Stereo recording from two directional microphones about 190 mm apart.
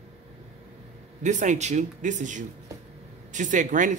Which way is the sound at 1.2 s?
40° right (ahead or behind).